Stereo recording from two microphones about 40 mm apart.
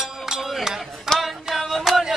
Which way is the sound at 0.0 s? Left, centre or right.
Centre.